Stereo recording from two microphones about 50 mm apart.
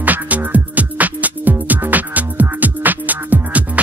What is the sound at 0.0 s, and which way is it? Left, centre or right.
Music, right.